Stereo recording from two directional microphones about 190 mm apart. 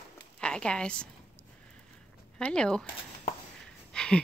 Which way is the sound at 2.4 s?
5° left (ahead or behind).